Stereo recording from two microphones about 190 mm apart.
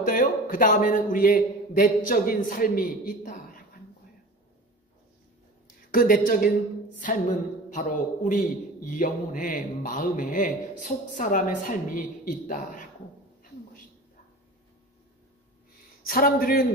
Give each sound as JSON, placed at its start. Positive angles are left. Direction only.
{"t": 0.0, "sound": "a man's voice", "side_deg": 45}
{"t": 5.9, "sound": "a man's voice", "side_deg": 50}
{"t": 7.7, "sound": "a man's voice", "side_deg": 40}
{"t": 16.1, "sound": "a man's voice", "side_deg": 50}